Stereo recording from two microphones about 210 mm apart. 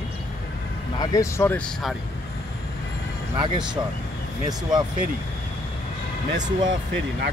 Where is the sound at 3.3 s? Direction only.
20° right (ahead or behind).